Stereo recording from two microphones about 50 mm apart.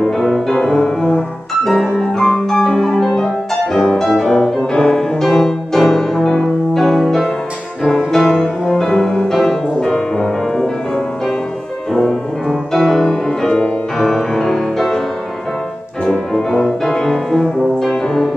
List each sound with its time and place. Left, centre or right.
0.2 s music: centre
11.9 s music: centre
16.1 s brass instrument: centre